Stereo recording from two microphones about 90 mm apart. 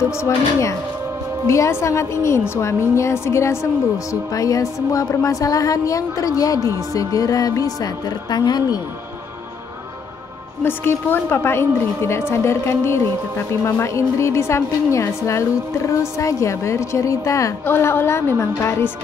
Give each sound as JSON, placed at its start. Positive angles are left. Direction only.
{"t": 0.2, "sound": "a woman's voice", "side_deg": 35}
{"t": 10.6, "sound": "a woman's voice", "side_deg": 25}
{"t": 17.6, "sound": "a woman's voice", "side_deg": 25}